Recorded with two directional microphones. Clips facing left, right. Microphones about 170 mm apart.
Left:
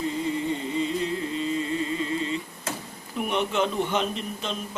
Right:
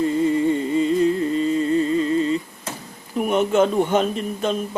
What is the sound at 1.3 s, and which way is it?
Music, 45° right (ahead or behind).